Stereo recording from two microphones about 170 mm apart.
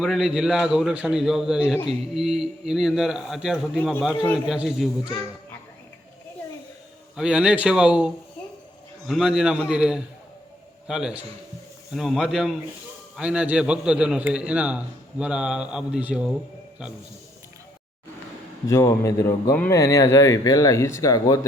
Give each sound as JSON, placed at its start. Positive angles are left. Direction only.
{"t": 0.0, "sound": "a man's voice", "side_deg": 0}
{"t": 4.1, "sound": "speech", "side_deg": 10}
{"t": 4.4, "sound": "a man's voice", "side_deg": -5}
{"t": 7.2, "sound": "a man's voice", "side_deg": -5}
{"t": 18.7, "sound": "speech", "side_deg": 15}